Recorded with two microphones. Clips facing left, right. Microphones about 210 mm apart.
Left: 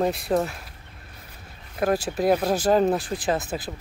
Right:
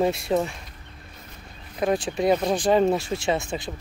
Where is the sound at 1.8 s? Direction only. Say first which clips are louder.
Even; 5° left (ahead or behind).